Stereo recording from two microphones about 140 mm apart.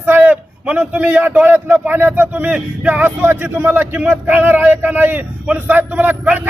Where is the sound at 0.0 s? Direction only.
15° right (ahead or behind).